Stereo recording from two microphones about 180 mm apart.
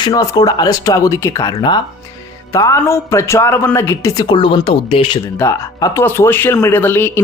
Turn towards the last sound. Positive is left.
turn(degrees=10)  # may be behind; listen again after turning